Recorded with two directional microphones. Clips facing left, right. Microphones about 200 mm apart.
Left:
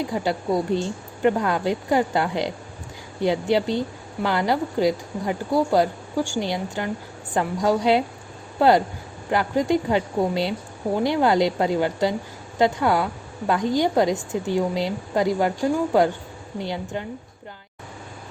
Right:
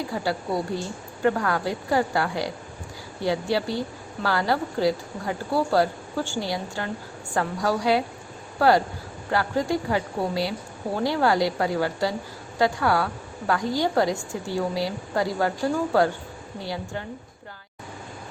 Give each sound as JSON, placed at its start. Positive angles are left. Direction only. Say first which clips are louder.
{"t": 0.0, "sound": "a woman's voice", "louder": "left 3 dB", "side_deg": 20}